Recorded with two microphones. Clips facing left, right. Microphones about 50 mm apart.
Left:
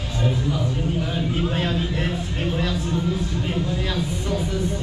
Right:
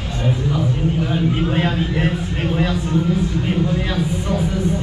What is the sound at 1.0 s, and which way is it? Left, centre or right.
Speech, right.